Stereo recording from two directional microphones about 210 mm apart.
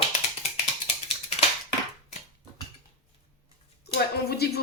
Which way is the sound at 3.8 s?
50° left (ahead or behind).